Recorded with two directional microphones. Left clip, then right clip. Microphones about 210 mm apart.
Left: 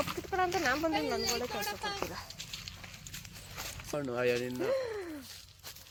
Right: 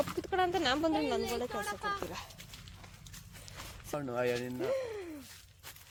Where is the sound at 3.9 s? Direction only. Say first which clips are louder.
Left 2 dB; 45° right (ahead or behind).